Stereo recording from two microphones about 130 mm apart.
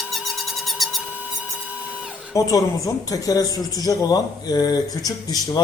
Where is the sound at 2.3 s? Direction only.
25° left (ahead or behind).